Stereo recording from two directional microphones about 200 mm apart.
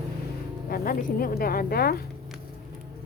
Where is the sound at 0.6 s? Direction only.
45° left (ahead or behind).